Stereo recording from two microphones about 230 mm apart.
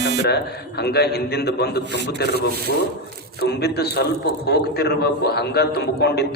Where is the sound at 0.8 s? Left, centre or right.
Left.